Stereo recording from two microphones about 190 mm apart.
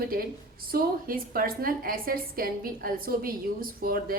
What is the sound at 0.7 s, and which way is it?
A woman's voice, 50° right (ahead or behind).